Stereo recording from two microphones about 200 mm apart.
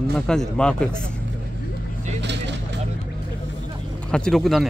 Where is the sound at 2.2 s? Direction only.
60° right (ahead or behind).